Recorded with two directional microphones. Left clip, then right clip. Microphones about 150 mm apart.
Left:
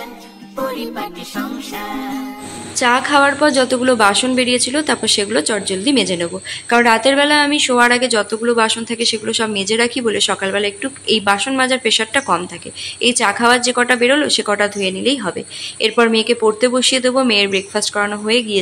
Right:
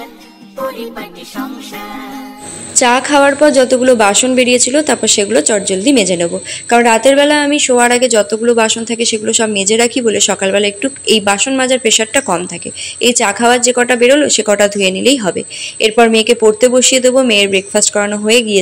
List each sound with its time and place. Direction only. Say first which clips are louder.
2.7 s a woman's voice: right 3 dB; 25° right (ahead or behind)